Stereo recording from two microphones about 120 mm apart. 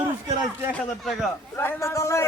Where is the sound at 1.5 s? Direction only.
25° left (ahead or behind).